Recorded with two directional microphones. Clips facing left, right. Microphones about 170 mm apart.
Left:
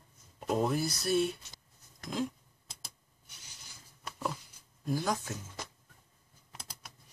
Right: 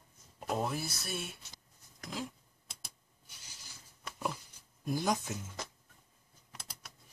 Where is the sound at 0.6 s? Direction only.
Centre (ahead or behind).